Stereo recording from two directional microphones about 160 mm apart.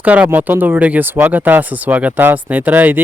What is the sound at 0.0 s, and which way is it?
Speech, 10° right (ahead or behind).